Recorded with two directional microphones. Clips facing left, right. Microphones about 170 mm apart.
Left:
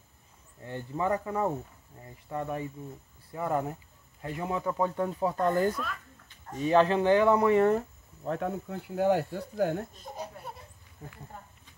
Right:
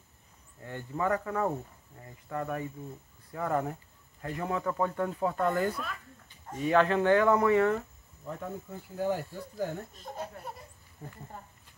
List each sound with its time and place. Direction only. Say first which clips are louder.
0.6 s speech: left 1 dB; 20° left (ahead or behind)
5.7 s a sound: left 3 dB; 10° right (ahead or behind)
6.6 s speech: left 2 dB; 25° left (ahead or behind)
8.2 s speech: left 7 dB; 70° left (ahead or behind)
10.2 s laughter: even; 5° left (ahead or behind)